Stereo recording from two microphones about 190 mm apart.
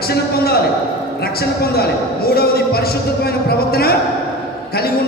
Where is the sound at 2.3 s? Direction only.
55° left (ahead or behind).